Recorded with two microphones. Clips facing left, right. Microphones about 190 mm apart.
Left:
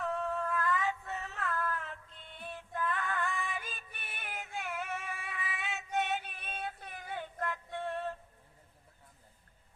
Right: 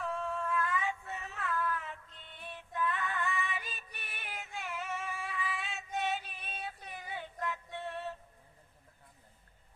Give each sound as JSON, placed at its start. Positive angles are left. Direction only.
{"t": 0.1, "sound": "music", "side_deg": 35}
{"t": 2.2, "sound": "female singing", "side_deg": 45}
{"t": 3.4, "sound": "music", "side_deg": 45}
{"t": 4.5, "sound": "female singing", "side_deg": 55}
{"t": 5.3, "sound": "female singing", "side_deg": 0}
{"t": 5.9, "sound": "a sound", "side_deg": 60}
{"t": 7.0, "sound": "music", "side_deg": 50}